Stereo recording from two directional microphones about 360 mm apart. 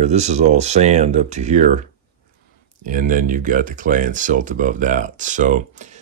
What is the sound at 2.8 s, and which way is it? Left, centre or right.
Speech, right.